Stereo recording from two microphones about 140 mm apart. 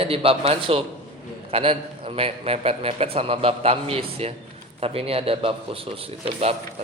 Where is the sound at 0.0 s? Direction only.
40° right (ahead or behind).